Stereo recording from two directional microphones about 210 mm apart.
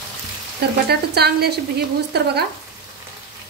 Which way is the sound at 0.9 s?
50° right (ahead or behind).